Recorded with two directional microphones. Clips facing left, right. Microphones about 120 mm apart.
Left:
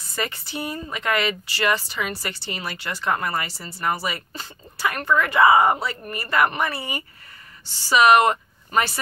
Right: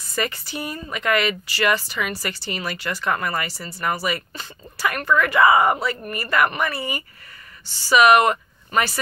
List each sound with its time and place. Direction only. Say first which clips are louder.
0.1 s speech: right 2 dB; 25° left (ahead or behind)